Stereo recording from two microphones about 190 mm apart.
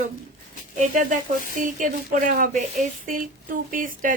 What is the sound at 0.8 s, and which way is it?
A woman's voice, 40° right (ahead or behind).